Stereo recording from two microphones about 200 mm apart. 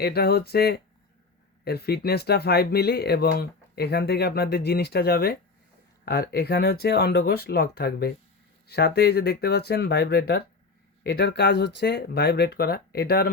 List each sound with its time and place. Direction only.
0.0 s speech: 50° left (ahead or behind)